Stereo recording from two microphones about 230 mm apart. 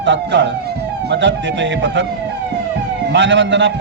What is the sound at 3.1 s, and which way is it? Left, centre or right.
Speech, right.